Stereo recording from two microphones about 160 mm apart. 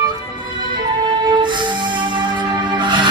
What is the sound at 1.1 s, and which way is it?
Music, 30° right (ahead or behind).